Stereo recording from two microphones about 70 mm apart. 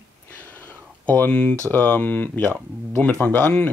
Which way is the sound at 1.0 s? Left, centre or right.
Centre.